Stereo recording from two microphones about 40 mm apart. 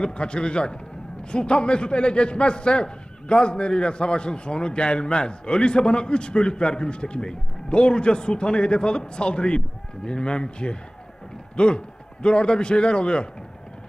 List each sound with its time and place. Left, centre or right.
0.0 s a man's voice: left